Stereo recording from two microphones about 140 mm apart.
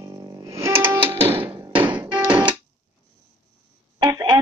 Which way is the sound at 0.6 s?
15° right (ahead or behind).